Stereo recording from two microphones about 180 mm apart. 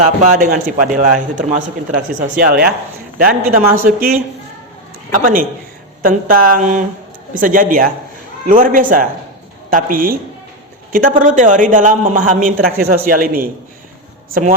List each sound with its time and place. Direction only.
0.0 s a man's voice: 40° right (ahead or behind)
5.1 s a man's voice: 50° right (ahead or behind)